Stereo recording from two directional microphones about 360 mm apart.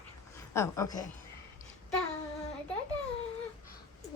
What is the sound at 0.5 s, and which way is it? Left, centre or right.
Speech, centre.